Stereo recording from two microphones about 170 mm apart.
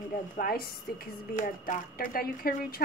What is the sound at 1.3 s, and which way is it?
Speech, 50° left (ahead or behind).